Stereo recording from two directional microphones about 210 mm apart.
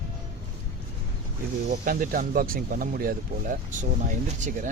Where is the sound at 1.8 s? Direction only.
40° right (ahead or behind).